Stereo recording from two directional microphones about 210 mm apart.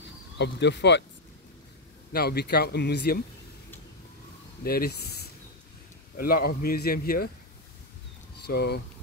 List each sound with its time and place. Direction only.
0.4 s speech: 55° left (ahead or behind)
2.1 s a man's voice: 50° left (ahead or behind)
4.6 s a man's voice: 45° left (ahead or behind)
8.5 s a man's voice: 50° left (ahead or behind)